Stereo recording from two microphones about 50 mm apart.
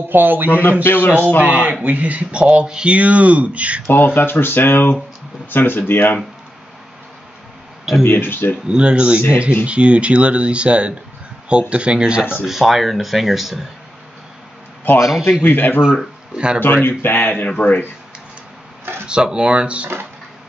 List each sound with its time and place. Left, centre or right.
0.1 s speech: right
0.5 s speech: left
1.4 s speech: right
3.8 s speech: left
8.0 s speech: left
8.6 s speech: centre
12.4 s speech: centre
15.4 s speech: left
16.3 s speech: centre
16.6 s speech: left
19.0 s speech: centre